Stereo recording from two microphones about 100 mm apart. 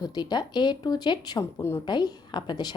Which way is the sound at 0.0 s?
40° left (ahead or behind).